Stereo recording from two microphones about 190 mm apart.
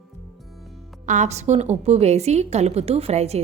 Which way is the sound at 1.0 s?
40° right (ahead or behind).